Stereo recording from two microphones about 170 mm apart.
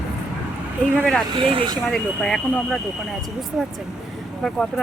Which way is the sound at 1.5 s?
30° right (ahead or behind).